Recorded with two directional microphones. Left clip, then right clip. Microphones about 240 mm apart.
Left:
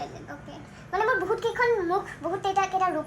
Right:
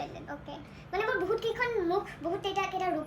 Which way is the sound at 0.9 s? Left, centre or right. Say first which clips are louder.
Left 5 dB; centre.